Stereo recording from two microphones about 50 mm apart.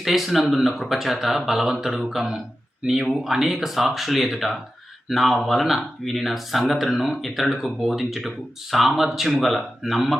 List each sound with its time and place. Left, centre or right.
0.0 s speech: centre